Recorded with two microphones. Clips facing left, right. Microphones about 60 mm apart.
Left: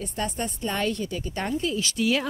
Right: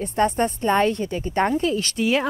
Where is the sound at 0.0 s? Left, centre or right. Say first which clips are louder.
Right 9 dB; right.